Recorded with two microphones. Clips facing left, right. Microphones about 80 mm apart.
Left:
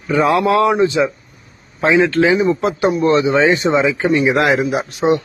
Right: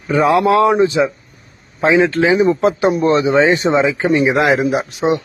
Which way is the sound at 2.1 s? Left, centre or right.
Right.